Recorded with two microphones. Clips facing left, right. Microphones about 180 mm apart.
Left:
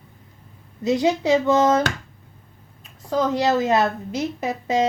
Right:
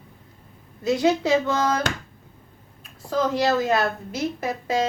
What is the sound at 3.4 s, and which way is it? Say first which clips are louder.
A woman's voice: left 2 dB; 20° left (ahead or behind).